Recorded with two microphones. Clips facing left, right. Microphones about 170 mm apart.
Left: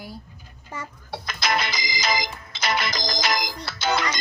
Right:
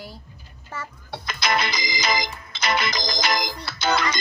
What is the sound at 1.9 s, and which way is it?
Music, 55° right (ahead or behind).